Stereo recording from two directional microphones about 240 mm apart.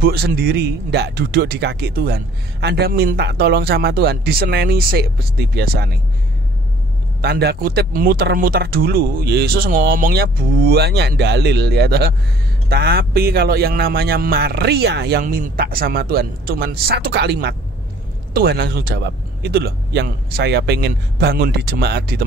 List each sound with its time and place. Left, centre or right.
0.0 s speech: right
7.2 s speech: right